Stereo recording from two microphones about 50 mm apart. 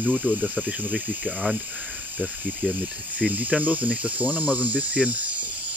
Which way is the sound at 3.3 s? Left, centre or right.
Right.